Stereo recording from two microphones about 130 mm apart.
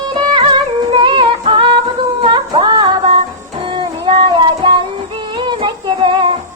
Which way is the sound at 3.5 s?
40° right (ahead or behind).